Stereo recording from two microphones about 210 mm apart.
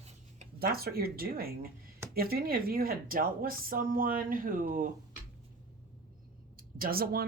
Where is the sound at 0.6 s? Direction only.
45° right (ahead or behind).